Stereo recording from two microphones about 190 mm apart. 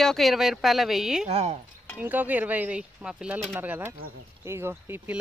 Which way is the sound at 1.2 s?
35° right (ahead or behind).